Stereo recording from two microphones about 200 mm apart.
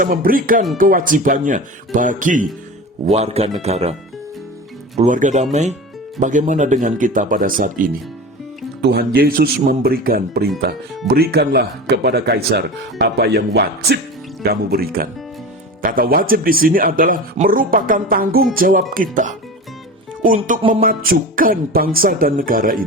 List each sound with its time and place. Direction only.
0.0 s speech: 45° right (ahead or behind)
4.9 s speech: 40° right (ahead or behind)
8.8 s speech: 55° right (ahead or behind)
20.6 s speech: 25° right (ahead or behind)
20.8 s speech: 45° right (ahead or behind)